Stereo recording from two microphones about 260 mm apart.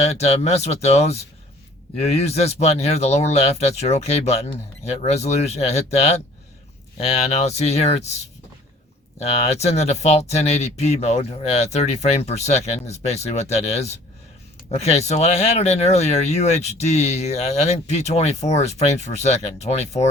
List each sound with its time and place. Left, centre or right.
0.0 s speech: left
9.1 s speech: left